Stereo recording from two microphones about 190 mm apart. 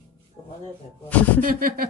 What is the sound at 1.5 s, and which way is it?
Speech, 50° right (ahead or behind).